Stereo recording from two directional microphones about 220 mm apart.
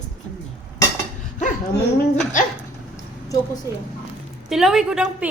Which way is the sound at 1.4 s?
35° left (ahead or behind).